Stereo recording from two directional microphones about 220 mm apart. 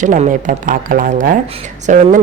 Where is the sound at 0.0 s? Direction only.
35° right (ahead or behind).